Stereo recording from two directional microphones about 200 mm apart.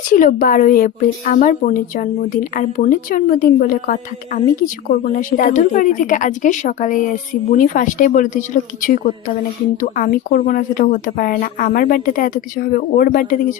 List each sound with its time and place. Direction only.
0.1 s a woman's voice: 40° left (ahead or behind)